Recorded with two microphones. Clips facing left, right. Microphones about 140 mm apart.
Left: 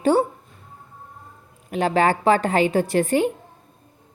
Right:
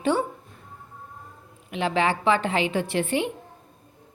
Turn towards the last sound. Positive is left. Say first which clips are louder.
# left 5 dB
turn(degrees=45)  # may be behind; listen again after turning